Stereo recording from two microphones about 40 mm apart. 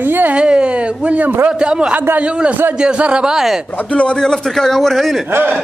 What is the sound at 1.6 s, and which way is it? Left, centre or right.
A man's voice, right.